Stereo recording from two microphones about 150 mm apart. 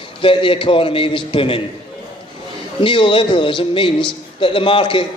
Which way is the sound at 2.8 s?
35° left (ahead or behind).